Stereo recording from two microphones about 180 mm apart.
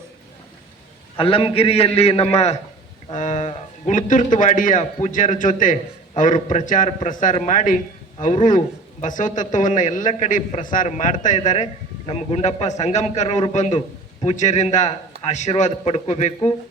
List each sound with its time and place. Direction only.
1.2 s a man's voice: 30° left (ahead or behind)
13.7 s a man's voice: 30° left (ahead or behind)
14.3 s a man's voice: 40° left (ahead or behind)